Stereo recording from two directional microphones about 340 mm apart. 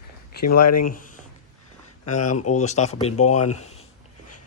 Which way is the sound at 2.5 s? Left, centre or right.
Centre.